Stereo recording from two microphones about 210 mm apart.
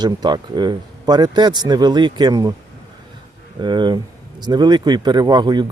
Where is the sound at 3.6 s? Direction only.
20° right (ahead or behind).